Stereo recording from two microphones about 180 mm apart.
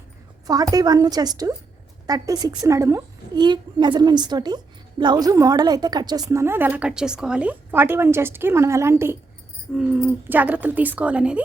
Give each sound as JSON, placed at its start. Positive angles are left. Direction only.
{"t": 0.4, "sound": "a woman's voice", "side_deg": -20}